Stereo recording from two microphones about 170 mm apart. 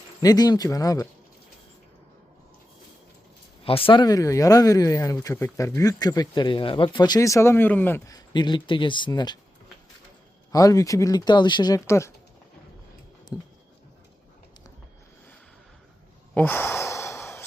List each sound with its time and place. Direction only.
0.2 s speech: 20° left (ahead or behind)
3.6 s speech: 35° left (ahead or behind)
10.5 s speech: 20° left (ahead or behind)
13.3 s a sound: 20° left (ahead or behind)
16.3 s sigh: 10° left (ahead or behind)